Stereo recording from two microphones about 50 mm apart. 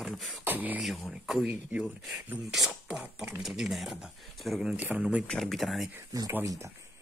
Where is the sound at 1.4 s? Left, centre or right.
Right.